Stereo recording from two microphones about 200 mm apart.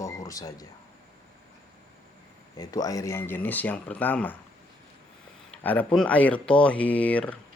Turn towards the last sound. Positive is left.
turn(degrees=5)  # may be behind; listen again after turning